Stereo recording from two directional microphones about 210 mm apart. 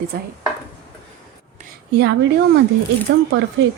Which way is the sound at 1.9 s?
55° right (ahead or behind).